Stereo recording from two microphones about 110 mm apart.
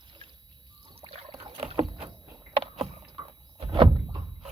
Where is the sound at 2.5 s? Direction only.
65° right (ahead or behind).